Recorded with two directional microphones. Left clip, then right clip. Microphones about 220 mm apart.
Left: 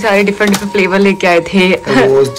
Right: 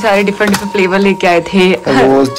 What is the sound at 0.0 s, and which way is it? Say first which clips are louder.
Speech: even; 5° right (ahead or behind).